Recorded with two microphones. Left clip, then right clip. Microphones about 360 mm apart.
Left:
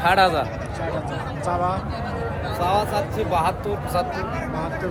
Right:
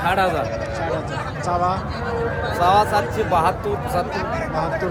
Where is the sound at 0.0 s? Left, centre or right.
Centre.